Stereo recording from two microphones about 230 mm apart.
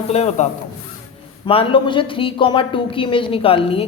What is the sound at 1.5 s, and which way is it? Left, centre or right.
A man's voice, left.